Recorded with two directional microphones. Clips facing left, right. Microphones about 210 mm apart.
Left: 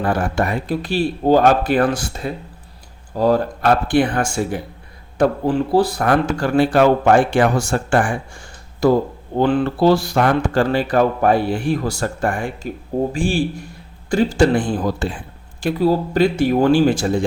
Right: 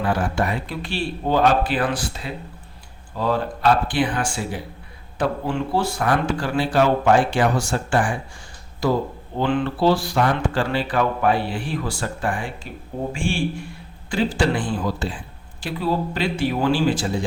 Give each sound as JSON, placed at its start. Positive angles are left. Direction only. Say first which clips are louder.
{"t": 0.0, "sound": "speech", "louder": "left 3 dB", "side_deg": 50}